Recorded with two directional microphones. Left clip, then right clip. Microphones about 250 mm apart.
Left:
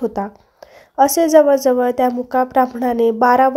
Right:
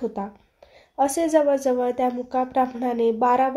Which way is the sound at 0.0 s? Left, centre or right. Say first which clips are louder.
Left 7 dB; left.